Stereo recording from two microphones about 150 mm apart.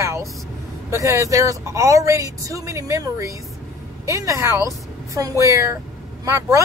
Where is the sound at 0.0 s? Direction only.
20° right (ahead or behind).